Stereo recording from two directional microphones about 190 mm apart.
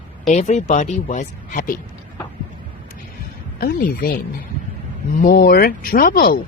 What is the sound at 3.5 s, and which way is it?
Speech, 45° left (ahead or behind).